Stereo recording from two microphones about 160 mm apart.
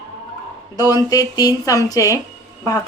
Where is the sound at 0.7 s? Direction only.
25° left (ahead or behind).